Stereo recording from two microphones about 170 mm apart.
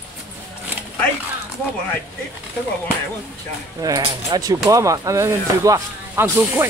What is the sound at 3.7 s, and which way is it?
Speech, 20° right (ahead or behind).